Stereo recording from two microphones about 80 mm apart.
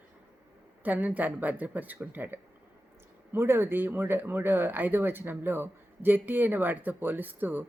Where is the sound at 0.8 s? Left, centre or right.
Right.